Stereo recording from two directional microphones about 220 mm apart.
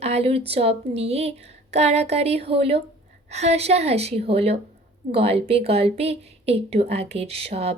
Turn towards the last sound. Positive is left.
turn(degrees=-25)  # may be behind; listen again after turning